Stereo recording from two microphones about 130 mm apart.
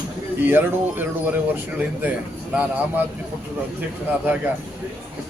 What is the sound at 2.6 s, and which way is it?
Speech, 15° right (ahead or behind).